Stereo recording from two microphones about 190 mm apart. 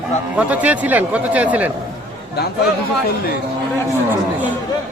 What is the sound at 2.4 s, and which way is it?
Speech, 60° left (ahead or behind).